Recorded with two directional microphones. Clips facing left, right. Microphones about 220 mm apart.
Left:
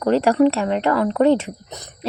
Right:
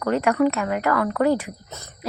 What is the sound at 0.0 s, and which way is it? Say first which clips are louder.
Speech: left 4 dB; 30° left (ahead or behind).